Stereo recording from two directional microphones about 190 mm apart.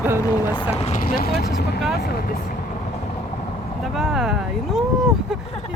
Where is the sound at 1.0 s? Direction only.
50° left (ahead or behind).